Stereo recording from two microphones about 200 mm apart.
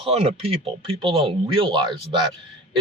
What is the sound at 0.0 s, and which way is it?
Speech, 30° right (ahead or behind).